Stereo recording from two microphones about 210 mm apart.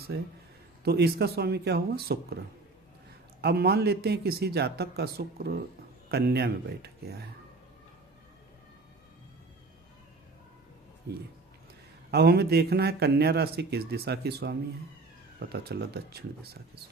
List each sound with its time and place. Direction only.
0.1 s speech: 50° right (ahead or behind)
3.4 s speech: 50° right (ahead or behind)
12.1 s speech: 50° right (ahead or behind)